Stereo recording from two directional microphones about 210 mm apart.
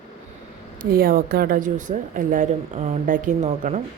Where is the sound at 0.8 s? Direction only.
45° right (ahead or behind).